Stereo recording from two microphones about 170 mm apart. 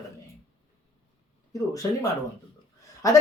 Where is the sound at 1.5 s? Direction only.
20° left (ahead or behind).